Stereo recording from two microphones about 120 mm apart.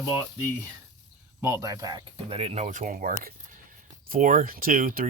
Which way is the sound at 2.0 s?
55° right (ahead or behind).